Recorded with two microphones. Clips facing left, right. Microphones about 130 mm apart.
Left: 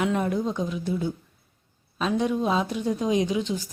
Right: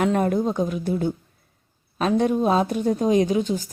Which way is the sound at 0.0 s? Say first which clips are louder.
Right 4 dB; 50° right (ahead or behind).